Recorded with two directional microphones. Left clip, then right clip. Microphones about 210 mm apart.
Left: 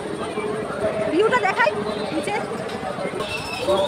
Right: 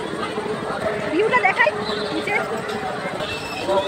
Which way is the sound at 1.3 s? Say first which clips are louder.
Right 2 dB; 10° left (ahead or behind).